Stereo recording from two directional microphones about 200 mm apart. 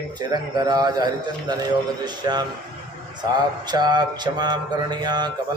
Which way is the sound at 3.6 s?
20° right (ahead or behind).